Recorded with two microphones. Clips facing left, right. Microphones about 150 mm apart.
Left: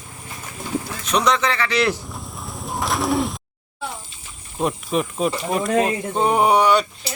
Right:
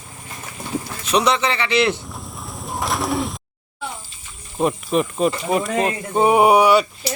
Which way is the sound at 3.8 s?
Centre (ahead or behind).